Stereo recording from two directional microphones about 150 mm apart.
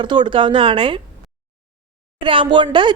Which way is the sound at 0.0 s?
30° right (ahead or behind).